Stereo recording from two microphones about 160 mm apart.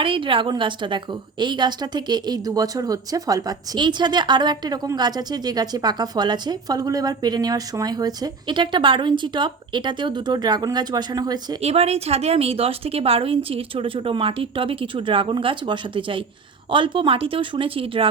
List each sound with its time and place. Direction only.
0.0 s a woman's voice: 35° right (ahead or behind)
11.6 s a woman's voice: 40° right (ahead or behind)